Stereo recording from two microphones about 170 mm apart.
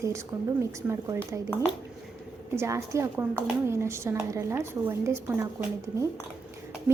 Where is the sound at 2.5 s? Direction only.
15° right (ahead or behind).